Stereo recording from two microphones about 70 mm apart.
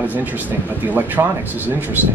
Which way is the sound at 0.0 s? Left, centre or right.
Right.